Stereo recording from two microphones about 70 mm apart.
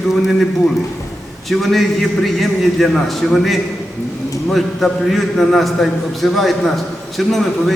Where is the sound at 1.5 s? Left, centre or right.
Centre.